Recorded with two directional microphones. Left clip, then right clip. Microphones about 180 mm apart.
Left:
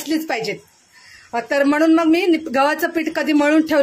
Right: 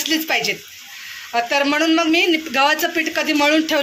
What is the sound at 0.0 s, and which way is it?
Speech, 40° left (ahead or behind).